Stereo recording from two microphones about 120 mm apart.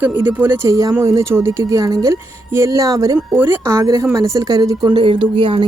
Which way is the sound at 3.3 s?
15° right (ahead or behind).